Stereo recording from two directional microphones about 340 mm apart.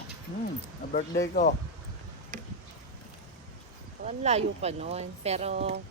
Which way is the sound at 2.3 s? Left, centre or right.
Right.